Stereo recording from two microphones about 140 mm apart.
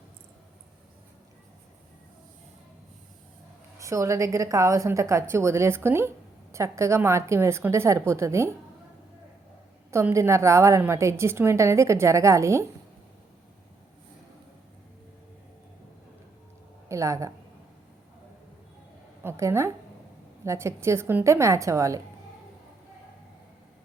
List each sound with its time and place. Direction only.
3.8 s a woman's voice: 20° right (ahead or behind)
9.9 s a woman's voice: 20° right (ahead or behind)
16.9 s a woman's voice: 20° right (ahead or behind)
19.2 s a woman's voice: 20° right (ahead or behind)